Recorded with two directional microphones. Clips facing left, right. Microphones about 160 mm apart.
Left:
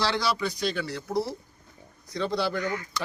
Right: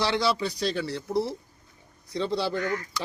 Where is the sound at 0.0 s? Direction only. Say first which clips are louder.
Right 2 dB; 25° right (ahead or behind).